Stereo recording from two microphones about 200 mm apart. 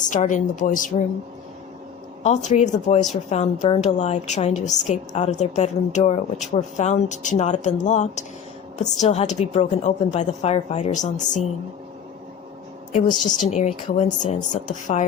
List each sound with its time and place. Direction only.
0.0 s a woman's voice: 40° left (ahead or behind)
2.2 s a woman's voice: 35° left (ahead or behind)
12.9 s a woman's voice: 40° left (ahead or behind)